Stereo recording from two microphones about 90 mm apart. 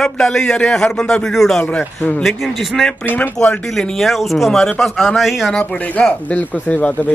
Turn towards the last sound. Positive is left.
turn(degrees=15)  # may be behind; listen again after turning